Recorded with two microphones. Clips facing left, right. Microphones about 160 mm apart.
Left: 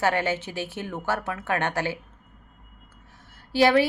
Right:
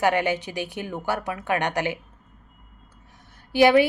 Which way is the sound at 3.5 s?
15° right (ahead or behind).